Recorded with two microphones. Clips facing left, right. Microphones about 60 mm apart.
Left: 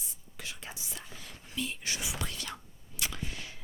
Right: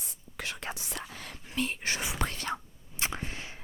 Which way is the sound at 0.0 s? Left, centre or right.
Right.